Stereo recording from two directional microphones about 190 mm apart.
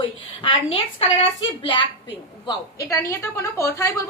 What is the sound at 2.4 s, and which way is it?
Speech, 15° left (ahead or behind).